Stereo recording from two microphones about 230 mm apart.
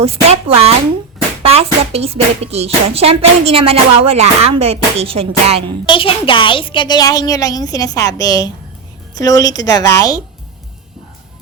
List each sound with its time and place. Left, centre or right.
0.0 s music: right
5.9 s a woman's voice: left